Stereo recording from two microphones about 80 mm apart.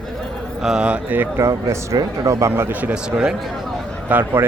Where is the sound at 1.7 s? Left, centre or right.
Right.